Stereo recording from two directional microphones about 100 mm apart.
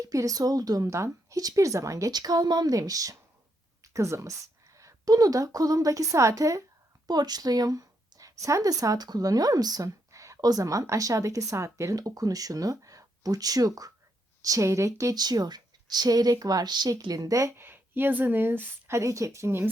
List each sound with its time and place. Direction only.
0.0 s a woman's voice: 35° right (ahead or behind)